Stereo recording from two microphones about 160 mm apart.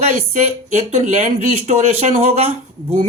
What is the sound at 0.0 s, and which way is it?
Speech, 45° right (ahead or behind).